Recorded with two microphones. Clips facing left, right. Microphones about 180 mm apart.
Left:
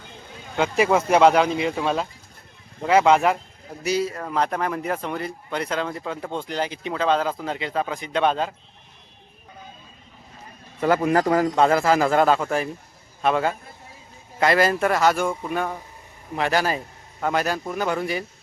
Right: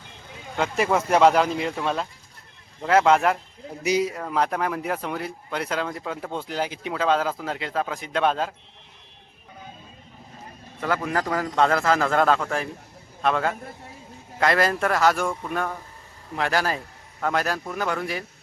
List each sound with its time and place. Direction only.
0.5 s speech: centre (ahead or behind)
3.8 s speech: 15° right (ahead or behind)
4.2 s speech: centre (ahead or behind)
11.3 s a man's voice: 10° left (ahead or behind)